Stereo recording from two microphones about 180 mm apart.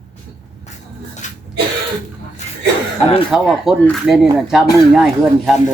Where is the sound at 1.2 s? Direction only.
45° left (ahead or behind).